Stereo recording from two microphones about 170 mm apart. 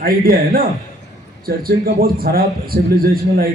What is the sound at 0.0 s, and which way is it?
A man's voice, 60° right (ahead or behind).